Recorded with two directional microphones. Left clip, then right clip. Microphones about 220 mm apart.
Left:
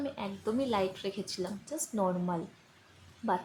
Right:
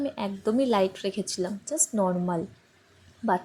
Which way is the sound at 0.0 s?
25° right (ahead or behind).